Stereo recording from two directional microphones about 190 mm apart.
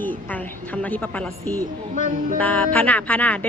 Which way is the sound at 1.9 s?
45° right (ahead or behind).